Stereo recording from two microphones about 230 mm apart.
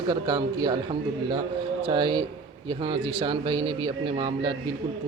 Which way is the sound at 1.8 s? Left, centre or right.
Right.